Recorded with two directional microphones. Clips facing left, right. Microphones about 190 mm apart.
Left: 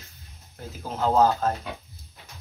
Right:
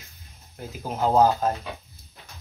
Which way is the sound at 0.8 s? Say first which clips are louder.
Right 1 dB; 15° right (ahead or behind).